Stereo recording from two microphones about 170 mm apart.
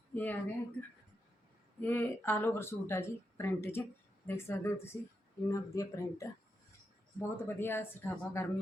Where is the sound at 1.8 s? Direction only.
10° left (ahead or behind).